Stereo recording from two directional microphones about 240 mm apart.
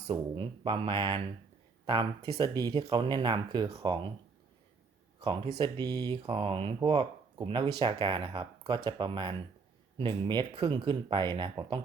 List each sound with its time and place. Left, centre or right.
0.1 s speech: right
2.4 s speech: centre
5.2 s speech: centre